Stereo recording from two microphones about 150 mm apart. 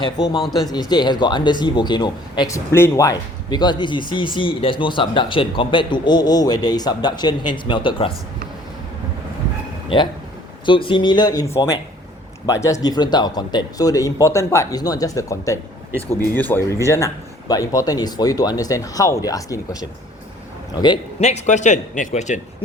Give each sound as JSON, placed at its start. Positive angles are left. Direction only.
{"t": 0.0, "sound": "speech", "side_deg": 30}
{"t": 2.7, "sound": "speech", "side_deg": 15}
{"t": 10.7, "sound": "speech", "side_deg": 35}
{"t": 21.2, "sound": "a man's voice", "side_deg": 50}